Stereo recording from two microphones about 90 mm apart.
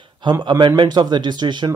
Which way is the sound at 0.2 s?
55° right (ahead or behind).